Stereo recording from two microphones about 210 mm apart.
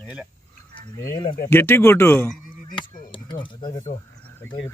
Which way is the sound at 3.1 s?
25° left (ahead or behind).